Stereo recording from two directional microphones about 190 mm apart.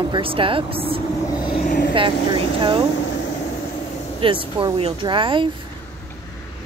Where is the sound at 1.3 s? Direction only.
25° left (ahead or behind).